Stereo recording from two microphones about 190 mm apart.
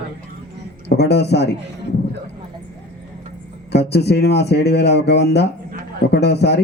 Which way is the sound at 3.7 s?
60° left (ahead or behind).